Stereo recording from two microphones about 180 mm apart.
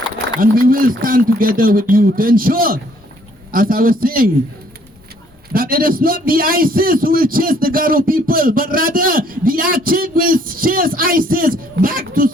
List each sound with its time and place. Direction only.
0.3 s a man's voice: 55° right (ahead or behind)
5.5 s a man's voice: 55° right (ahead or behind)